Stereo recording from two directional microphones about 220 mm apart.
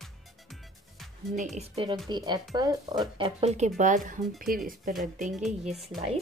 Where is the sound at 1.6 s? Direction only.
25° right (ahead or behind); by 4.6 s 40° right (ahead or behind).